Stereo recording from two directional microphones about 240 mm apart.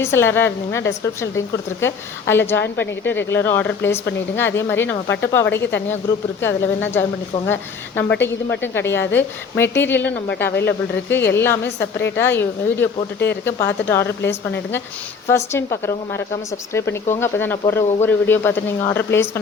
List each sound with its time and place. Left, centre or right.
0.0 s speech: centre
14.2 s a woman's voice: left
15.3 s speech: centre